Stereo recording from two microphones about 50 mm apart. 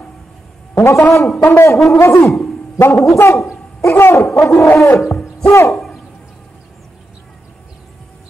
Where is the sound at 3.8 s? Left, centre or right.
Left.